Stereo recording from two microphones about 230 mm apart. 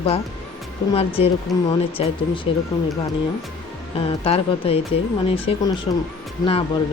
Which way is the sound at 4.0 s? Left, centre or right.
Left.